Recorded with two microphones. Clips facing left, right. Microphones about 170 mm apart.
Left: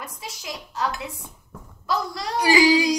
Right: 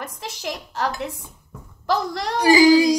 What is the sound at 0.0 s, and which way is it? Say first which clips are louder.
A woman's voice: right 6 dB; 75° right (ahead or behind).